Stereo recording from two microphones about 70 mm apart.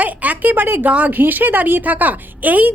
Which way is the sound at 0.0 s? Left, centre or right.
Right.